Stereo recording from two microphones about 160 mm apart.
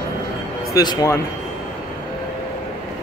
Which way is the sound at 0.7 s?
20° left (ahead or behind).